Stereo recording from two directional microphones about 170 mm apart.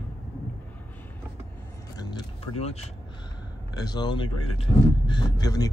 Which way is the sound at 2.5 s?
40° left (ahead or behind).